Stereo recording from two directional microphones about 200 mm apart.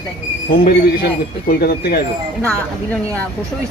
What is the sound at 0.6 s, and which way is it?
Speech, 50° left (ahead or behind).